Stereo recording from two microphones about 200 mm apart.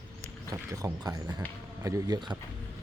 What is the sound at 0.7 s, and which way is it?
A man's voice, 15° right (ahead or behind).